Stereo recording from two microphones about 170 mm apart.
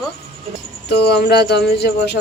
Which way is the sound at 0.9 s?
75° left (ahead or behind).